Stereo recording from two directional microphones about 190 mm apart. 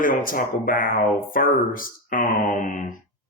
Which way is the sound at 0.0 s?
45° left (ahead or behind).